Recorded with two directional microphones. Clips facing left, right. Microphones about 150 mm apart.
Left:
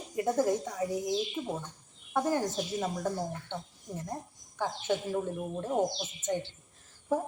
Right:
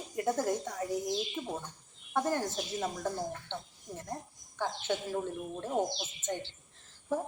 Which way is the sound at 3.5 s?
10° left (ahead or behind).